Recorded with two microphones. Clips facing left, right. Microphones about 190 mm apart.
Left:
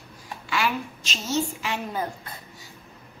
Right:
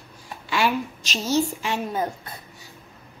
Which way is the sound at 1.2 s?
25° right (ahead or behind).